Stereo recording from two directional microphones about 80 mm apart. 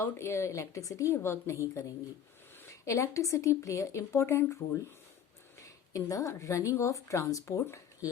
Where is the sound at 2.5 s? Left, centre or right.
Left.